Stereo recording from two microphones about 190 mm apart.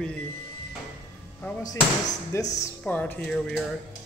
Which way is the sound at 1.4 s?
10° left (ahead or behind).